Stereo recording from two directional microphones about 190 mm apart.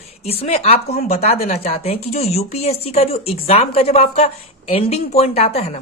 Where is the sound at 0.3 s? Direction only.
30° left (ahead or behind).